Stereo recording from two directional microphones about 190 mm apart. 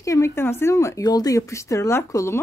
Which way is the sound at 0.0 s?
15° left (ahead or behind).